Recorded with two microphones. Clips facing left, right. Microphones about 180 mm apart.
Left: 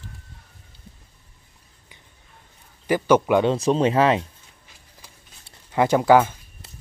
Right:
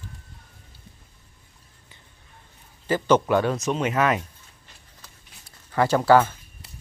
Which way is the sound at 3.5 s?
30° left (ahead or behind).